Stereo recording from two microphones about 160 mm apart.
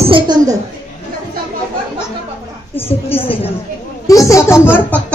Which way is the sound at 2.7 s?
35° left (ahead or behind).